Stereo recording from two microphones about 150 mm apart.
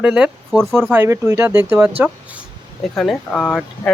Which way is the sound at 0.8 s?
15° right (ahead or behind).